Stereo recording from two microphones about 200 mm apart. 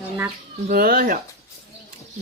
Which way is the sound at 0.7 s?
45° right (ahead or behind).